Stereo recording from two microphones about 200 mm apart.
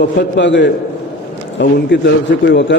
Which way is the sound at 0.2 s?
65° left (ahead or behind).